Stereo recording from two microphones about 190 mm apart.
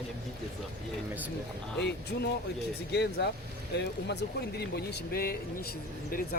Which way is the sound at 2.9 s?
60° left (ahead or behind).